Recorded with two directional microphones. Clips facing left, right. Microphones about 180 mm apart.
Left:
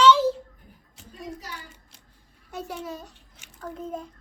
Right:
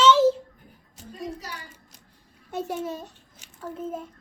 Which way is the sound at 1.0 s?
40° right (ahead or behind).